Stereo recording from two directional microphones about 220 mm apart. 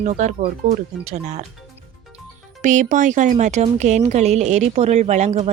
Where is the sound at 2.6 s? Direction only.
35° right (ahead or behind).